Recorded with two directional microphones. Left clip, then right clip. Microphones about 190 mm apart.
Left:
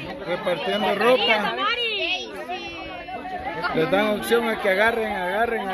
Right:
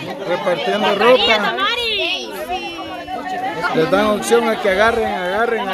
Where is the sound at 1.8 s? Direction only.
35° right (ahead or behind).